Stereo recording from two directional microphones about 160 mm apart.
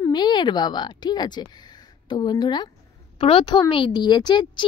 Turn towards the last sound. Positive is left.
turn(degrees=30)  # may be behind; listen again after turning